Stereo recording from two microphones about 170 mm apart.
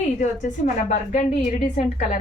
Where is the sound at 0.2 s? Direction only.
45° left (ahead or behind).